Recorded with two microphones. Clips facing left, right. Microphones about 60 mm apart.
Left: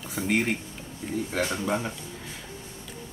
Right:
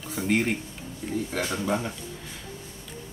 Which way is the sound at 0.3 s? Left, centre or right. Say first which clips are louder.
Right 1 dB; centre.